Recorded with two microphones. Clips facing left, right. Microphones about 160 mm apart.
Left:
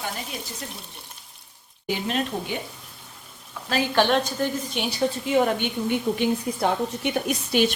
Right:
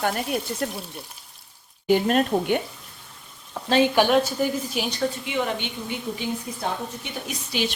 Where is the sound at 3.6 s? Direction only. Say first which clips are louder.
Right 6 dB; 25° right (ahead or behind).